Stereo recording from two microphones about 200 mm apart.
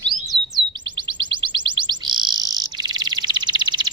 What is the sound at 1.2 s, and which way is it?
Bird, 25° right (ahead or behind).